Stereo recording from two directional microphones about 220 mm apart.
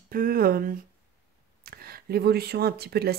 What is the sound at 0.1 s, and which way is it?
Speech, 40° right (ahead or behind).